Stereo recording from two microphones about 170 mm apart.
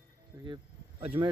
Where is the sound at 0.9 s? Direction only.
30° right (ahead or behind).